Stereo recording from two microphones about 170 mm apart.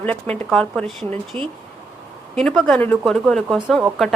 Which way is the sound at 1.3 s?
35° right (ahead or behind).